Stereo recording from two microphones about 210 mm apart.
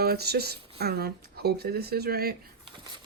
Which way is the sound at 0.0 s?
50° right (ahead or behind).